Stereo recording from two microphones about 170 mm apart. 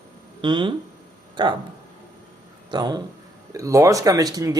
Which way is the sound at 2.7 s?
25° right (ahead or behind).